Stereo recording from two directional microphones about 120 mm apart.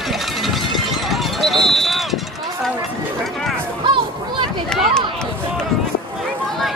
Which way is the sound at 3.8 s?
40° right (ahead or behind).